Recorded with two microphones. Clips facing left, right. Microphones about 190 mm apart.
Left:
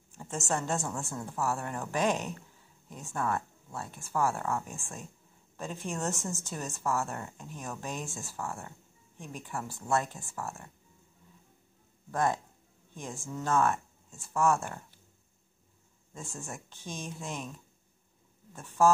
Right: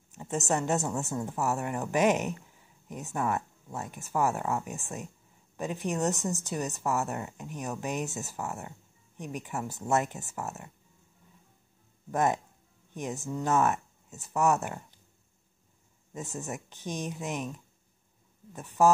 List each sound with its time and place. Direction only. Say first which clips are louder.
0.1 s speech: right 4 dB; 15° right (ahead or behind)
12.1 s speech: right 2 dB; 20° right (ahead or behind)
16.1 s speech: right 5 dB; 20° right (ahead or behind)
18.5 s speech: right 1 dB; 15° right (ahead or behind)